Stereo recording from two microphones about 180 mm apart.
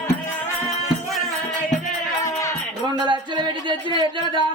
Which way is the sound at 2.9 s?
25° right (ahead or behind).